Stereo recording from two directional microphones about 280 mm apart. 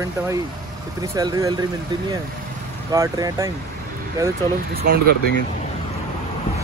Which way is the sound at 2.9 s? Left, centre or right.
Centre.